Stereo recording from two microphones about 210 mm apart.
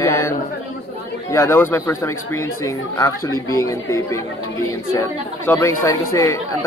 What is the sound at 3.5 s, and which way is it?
Speech, 15° left (ahead or behind).